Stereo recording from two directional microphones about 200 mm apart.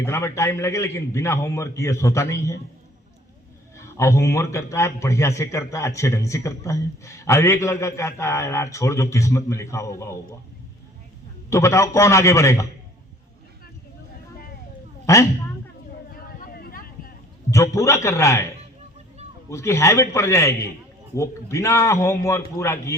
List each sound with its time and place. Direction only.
0.0 s a man's voice: 15° left (ahead or behind)
3.8 s a man's voice: 15° left (ahead or behind)
11.4 s a man's voice: 15° left (ahead or behind)
15.0 s speech: 15° left (ahead or behind)
16.1 s a sound: 50° left (ahead or behind)
17.5 s a man's voice: 15° left (ahead or behind)
19.5 s a man's voice: 15° left (ahead or behind)